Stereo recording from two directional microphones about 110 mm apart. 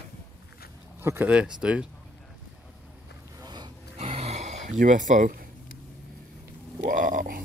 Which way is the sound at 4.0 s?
70° right (ahead or behind).